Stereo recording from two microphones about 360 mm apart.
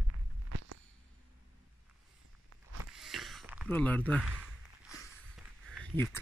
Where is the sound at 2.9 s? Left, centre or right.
Centre.